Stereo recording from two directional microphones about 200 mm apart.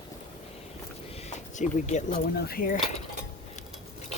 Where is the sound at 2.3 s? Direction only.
50° left (ahead or behind).